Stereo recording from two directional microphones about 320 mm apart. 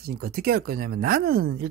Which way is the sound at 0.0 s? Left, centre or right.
Right.